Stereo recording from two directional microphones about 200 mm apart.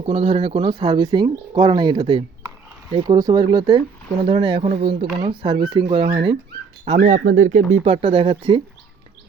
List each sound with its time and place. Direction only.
0.0 s speech: 30° right (ahead or behind)
7.0 s speech: 45° right (ahead or behind); by 8.6 s 25° right (ahead or behind)